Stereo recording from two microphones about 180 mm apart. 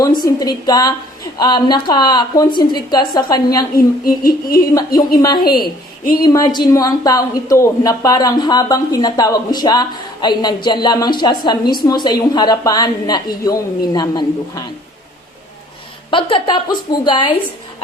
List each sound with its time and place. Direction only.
0.0 s a woman's voice: 20° left (ahead or behind)
4.0 s a sound: 55° left (ahead or behind)
5.5 s a woman's voice: 25° left (ahead or behind)
16.0 s a woman's voice: 25° left (ahead or behind)